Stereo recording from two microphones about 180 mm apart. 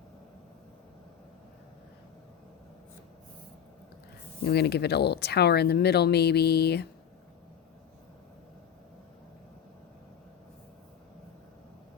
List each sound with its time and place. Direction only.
4.4 s speech: 65° left (ahead or behind)